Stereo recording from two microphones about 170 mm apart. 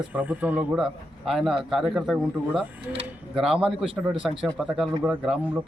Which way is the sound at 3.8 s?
30° right (ahead or behind).